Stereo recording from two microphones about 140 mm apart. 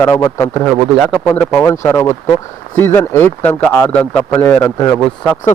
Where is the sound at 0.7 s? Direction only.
Centre (ahead or behind).